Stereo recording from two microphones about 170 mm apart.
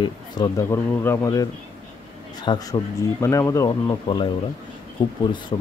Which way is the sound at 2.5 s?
25° left (ahead or behind).